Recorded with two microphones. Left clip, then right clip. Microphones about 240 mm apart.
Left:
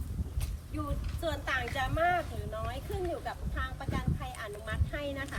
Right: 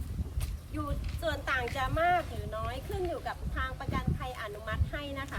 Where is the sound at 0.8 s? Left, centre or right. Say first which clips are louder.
Right 1 dB; centre.